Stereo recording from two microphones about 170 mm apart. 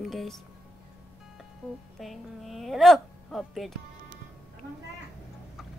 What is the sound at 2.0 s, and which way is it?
Speech, centre (ahead or behind).